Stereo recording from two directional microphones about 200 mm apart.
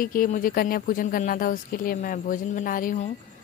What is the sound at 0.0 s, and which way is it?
Speech, 45° left (ahead or behind).